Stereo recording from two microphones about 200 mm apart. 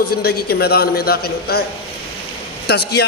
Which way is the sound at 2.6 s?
55° left (ahead or behind).